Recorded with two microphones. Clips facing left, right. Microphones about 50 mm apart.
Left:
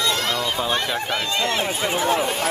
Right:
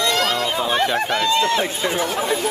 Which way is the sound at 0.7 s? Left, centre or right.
Centre.